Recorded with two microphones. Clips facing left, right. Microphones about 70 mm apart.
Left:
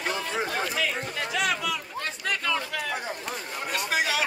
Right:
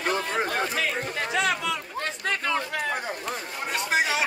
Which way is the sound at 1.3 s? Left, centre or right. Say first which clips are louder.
Right 2 dB; right.